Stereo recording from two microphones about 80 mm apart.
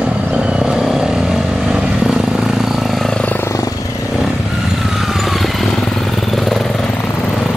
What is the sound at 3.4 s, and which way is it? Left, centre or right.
Vehicle, left.